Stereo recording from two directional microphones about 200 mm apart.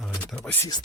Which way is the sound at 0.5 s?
15° left (ahead or behind).